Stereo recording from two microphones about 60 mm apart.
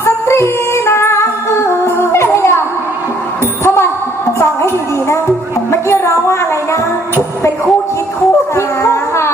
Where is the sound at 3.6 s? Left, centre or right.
Left.